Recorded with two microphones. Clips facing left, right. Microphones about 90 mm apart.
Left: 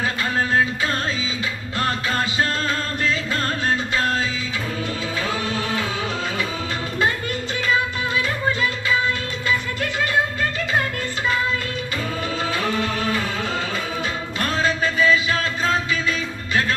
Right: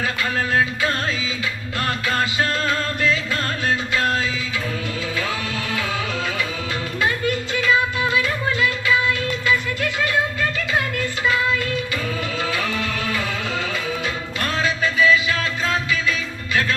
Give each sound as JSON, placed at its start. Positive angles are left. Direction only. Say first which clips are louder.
{"t": 1.8, "sound": "music", "louder": "even", "side_deg": 30}
{"t": 12.5, "sound": "music", "louder": "left 2 dB", "side_deg": 35}
{"t": 14.4, "sound": "music", "louder": "left 1 dB", "side_deg": 35}